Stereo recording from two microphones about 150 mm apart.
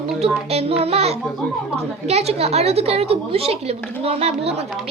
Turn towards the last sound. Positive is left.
turn(degrees=-40)  # may be behind; listen again after turning